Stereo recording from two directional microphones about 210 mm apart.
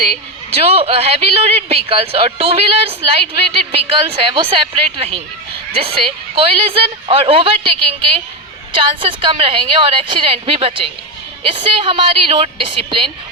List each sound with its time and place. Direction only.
0.6 s speech: 30° right (ahead or behind)
8.7 s speech: 25° right (ahead or behind)